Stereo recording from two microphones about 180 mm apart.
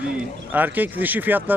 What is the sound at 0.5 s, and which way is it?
Speech, 10° right (ahead or behind).